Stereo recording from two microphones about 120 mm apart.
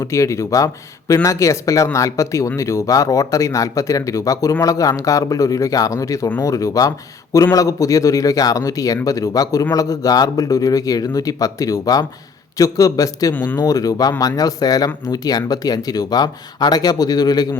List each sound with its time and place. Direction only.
0.0 s speech: 25° left (ahead or behind)